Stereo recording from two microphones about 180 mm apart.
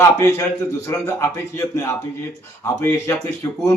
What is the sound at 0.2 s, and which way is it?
A man's voice, 15° left (ahead or behind).